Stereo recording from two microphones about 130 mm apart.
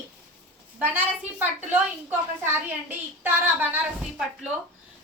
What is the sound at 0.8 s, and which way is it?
A woman's voice, 15° right (ahead or behind).